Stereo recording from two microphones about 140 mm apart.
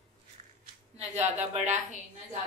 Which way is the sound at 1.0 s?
55° right (ahead or behind).